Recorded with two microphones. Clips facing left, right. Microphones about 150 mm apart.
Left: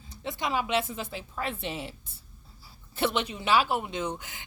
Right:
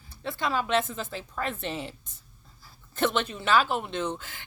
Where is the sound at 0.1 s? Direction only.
20° left (ahead or behind).